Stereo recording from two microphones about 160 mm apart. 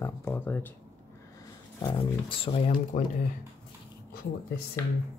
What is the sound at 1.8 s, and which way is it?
Speech, 30° left (ahead or behind).